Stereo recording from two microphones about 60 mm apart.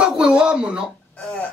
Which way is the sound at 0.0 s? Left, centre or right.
Centre.